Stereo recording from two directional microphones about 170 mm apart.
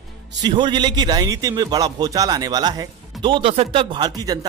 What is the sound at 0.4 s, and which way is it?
A man's voice, 25° right (ahead or behind).